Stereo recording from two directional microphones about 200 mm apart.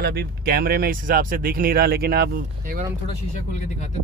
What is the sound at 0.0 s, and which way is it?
Speech, 50° right (ahead or behind).